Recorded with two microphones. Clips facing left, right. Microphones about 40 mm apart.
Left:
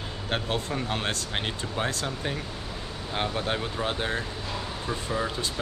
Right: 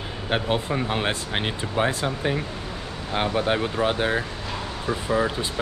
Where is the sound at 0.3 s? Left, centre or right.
Centre.